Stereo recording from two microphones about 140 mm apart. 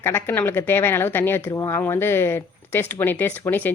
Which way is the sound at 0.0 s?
15° left (ahead or behind).